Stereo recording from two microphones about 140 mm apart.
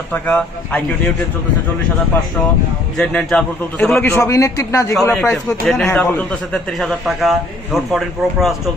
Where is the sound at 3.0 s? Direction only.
5° left (ahead or behind); by 4.9 s 20° left (ahead or behind).